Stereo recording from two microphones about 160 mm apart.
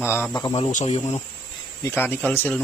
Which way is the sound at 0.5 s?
45° left (ahead or behind).